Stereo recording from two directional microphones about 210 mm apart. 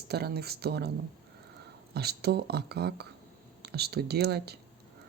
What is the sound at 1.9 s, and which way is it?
Speech, 50° right (ahead or behind).